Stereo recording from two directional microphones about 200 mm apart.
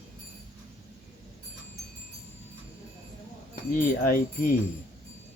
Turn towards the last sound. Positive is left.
turn(degrees=45)  # may be behind; listen again after turning